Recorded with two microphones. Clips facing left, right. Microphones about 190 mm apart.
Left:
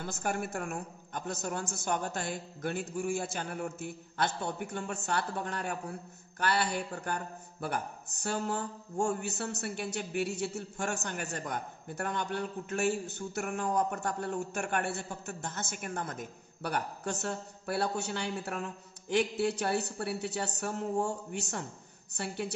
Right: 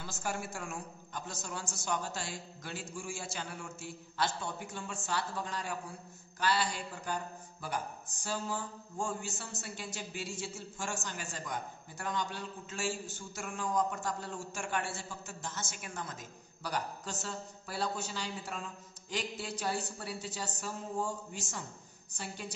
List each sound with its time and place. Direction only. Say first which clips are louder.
0.0 s a man's voice: left 5 dB; 55° left (ahead or behind)